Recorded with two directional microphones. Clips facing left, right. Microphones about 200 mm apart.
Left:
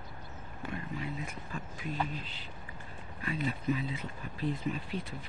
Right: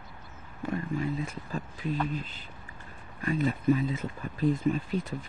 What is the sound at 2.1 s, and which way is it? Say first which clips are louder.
Speech: right 6 dB; 50° right (ahead or behind).